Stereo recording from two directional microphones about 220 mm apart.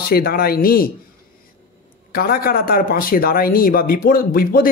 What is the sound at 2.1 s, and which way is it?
Speech, 45° left (ahead or behind).